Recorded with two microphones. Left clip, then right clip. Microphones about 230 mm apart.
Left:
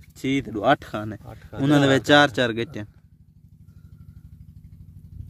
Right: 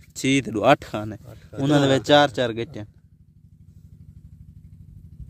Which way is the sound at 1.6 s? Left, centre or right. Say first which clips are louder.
Left 1 dB; centre.